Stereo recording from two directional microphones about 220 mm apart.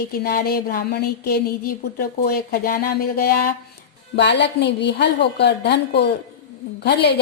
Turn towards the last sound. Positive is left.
turn(degrees=50)  # may be behind; listen again after turning